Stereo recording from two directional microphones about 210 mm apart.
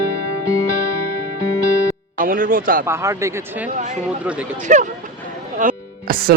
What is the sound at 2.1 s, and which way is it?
Music, 40° right (ahead or behind).